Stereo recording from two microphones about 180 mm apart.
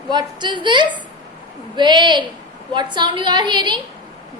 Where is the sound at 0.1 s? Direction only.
25° right (ahead or behind).